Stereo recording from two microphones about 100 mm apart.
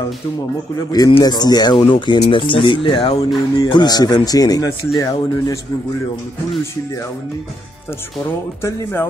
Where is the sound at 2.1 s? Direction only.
65° left (ahead or behind); by 5.6 s 30° left (ahead or behind).